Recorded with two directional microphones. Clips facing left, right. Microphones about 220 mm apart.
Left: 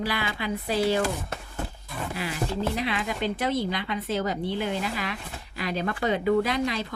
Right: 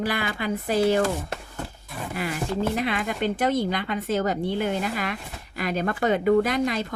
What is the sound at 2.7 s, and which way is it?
Speech, 50° right (ahead or behind).